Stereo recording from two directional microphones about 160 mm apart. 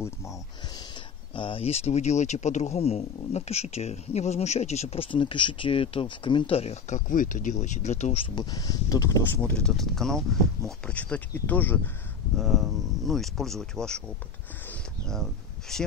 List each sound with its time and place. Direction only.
0.0 s speech: 20° left (ahead or behind)
1.3 s speech: 35° left (ahead or behind)
8.4 s speech: 25° left (ahead or behind)
9.4 s speech: 5° left (ahead or behind)
12.4 s speech: centre (ahead or behind)
14.7 s a sound: 5° left (ahead or behind)
15.7 s speech: 5° left (ahead or behind)